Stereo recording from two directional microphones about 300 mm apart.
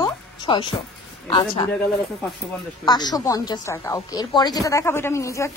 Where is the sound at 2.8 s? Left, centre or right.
Centre.